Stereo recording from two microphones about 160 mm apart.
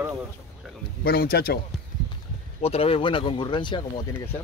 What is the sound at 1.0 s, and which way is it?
Speech, 70° left (ahead or behind).